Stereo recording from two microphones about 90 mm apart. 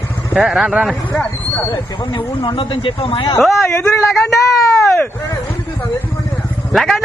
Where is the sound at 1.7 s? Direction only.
55° left (ahead or behind); by 3.3 s 75° left (ahead or behind).